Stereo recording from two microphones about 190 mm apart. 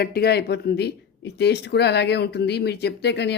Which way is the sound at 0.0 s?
55° left (ahead or behind).